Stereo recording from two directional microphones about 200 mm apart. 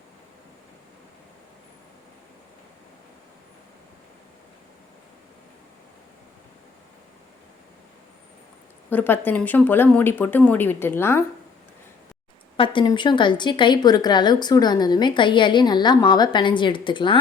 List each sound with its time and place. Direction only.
8.9 s speech: 10° left (ahead or behind)
12.5 s a woman's voice: 25° left (ahead or behind)